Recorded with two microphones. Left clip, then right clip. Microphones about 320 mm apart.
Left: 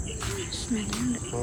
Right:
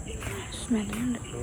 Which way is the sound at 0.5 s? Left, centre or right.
Centre.